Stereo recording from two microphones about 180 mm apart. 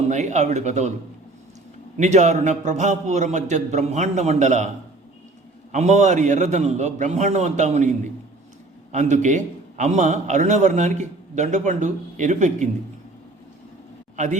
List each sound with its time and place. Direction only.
0.1 s a man's voice: 40° right (ahead or behind)
2.0 s a man's voice: 40° right (ahead or behind)
5.7 s a man's voice: 40° right (ahead or behind)